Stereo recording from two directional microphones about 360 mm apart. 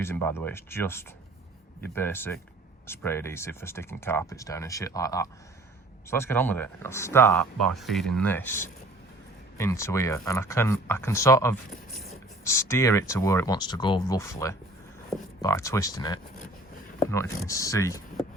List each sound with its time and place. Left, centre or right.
0.0 s speech: centre